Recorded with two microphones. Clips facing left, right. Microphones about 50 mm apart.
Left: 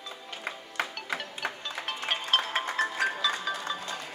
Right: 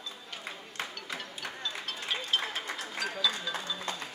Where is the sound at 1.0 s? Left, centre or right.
Left.